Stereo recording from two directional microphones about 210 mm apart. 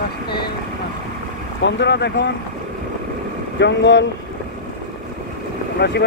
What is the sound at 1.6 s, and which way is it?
Speech, 55° left (ahead or behind).